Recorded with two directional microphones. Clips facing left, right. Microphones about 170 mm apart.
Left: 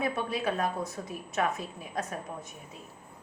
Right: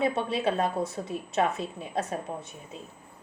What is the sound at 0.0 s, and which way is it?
A woman's voice, 25° right (ahead or behind).